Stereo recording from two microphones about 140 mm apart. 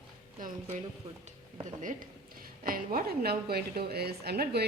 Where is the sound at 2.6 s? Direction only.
90° right.